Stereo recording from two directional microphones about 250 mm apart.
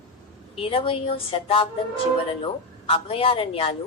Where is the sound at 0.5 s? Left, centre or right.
Left.